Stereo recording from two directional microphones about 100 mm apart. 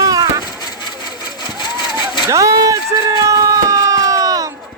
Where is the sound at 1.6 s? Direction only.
50° left (ahead or behind).